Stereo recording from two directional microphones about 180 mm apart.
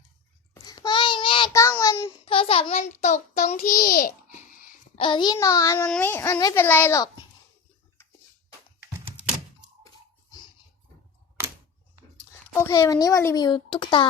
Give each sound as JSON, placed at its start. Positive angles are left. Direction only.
{"t": 0.6, "sound": "babbling", "side_deg": 25}
{"t": 1.5, "sound": "child singing", "side_deg": 15}
{"t": 4.9, "sound": "child singing", "side_deg": 25}
{"t": 5.9, "sound": "a child's voice", "side_deg": 10}
{"t": 12.1, "sound": "a child's voice", "side_deg": 15}